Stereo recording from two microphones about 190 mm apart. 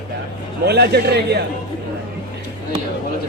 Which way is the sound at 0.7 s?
60° right (ahead or behind).